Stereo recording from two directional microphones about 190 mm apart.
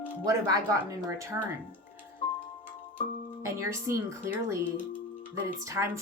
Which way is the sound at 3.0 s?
40° left (ahead or behind).